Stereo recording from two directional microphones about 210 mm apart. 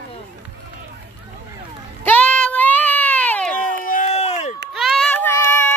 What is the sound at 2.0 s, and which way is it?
Sheep, 5° left (ahead or behind).